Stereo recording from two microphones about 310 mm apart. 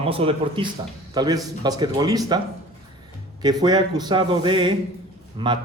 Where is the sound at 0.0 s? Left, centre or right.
Centre.